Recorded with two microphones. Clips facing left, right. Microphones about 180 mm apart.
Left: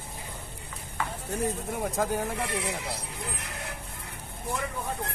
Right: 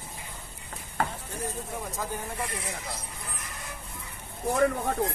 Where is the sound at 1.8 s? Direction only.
60° left (ahead or behind).